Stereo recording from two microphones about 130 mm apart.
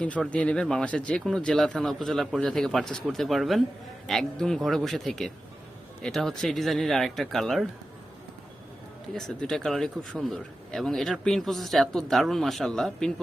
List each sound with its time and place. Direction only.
0.0 s speech: 10° left (ahead or behind)
9.1 s speech: 5° left (ahead or behind)